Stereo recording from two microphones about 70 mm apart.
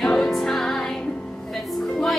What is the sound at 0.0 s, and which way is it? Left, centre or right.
Music, centre.